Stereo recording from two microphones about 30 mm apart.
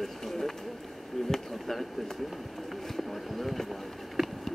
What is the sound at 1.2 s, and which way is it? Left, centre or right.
Chop, centre.